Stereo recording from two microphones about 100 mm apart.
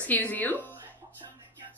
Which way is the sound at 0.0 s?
15° left (ahead or behind).